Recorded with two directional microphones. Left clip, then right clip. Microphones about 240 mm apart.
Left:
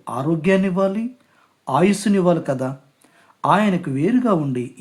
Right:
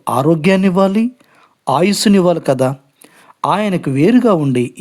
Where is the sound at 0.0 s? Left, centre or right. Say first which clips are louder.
Right 9 dB; right.